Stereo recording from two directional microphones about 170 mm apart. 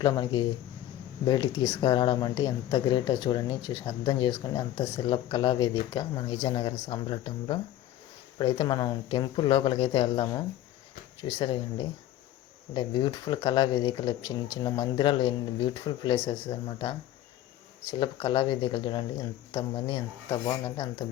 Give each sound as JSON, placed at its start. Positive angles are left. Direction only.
{"t": 0.0, "sound": "speech", "side_deg": 25}